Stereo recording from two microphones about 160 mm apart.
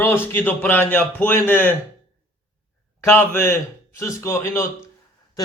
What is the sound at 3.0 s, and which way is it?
A man's voice, 15° left (ahead or behind).